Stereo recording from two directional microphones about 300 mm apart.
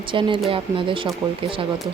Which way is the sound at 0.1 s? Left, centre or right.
Centre.